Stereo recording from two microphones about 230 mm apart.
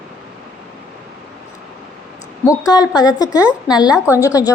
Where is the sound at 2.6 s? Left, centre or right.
Centre.